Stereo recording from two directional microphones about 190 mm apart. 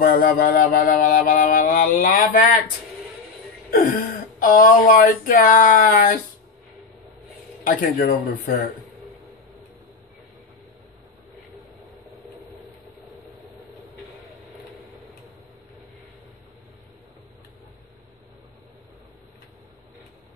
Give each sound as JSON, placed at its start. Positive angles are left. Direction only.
{"t": 0.0, "sound": "music", "side_deg": 50}
{"t": 3.7, "sound": "speech", "side_deg": 45}
{"t": 7.6, "sound": "speech", "side_deg": 45}